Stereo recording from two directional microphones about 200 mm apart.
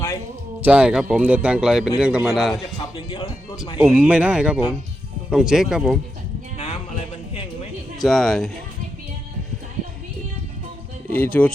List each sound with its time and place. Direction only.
0.6 s speech: 5° right (ahead or behind)
2.9 s speech: 25° left (ahead or behind)
3.8 s speech: 10° right (ahead or behind)
8.0 s speech: centre (ahead or behind)
11.1 s speech: 10° left (ahead or behind)